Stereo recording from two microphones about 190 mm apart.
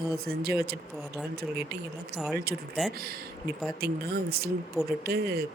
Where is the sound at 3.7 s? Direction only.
55° right (ahead or behind).